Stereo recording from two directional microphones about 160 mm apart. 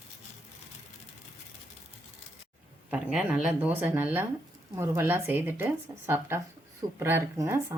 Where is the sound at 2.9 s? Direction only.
5° right (ahead or behind).